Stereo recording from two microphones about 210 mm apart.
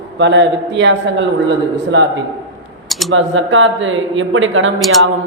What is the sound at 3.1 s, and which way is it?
A woman's voice, 65° right (ahead or behind).